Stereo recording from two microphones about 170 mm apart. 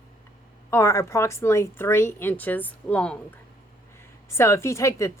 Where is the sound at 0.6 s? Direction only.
15° left (ahead or behind).